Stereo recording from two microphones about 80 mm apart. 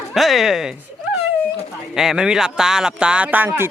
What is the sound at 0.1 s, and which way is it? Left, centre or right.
Speech, centre.